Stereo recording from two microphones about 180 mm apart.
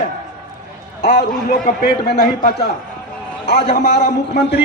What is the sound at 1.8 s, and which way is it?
A man's voice, 65° left (ahead or behind).